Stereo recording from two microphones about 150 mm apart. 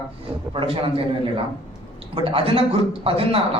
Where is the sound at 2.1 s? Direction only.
40° right (ahead or behind).